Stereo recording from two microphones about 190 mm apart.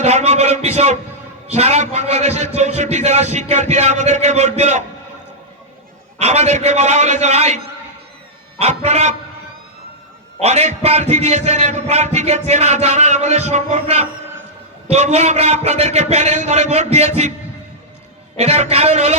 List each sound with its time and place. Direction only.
0.0 s a sound: 35° right (ahead or behind)
1.5 s a man's voice: 35° right (ahead or behind)
6.1 s a man's voice: 35° right (ahead or behind)
10.4 s a man's voice: 35° right (ahead or behind)
18.3 s a man's voice: 35° right (ahead or behind)